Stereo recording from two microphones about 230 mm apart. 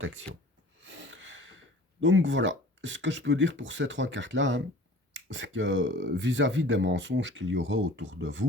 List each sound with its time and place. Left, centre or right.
0.8 s speech: right